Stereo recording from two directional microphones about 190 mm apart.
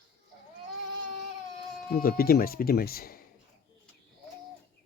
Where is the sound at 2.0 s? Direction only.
50° left (ahead or behind).